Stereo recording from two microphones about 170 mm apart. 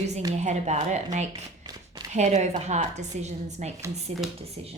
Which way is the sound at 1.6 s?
25° right (ahead or behind).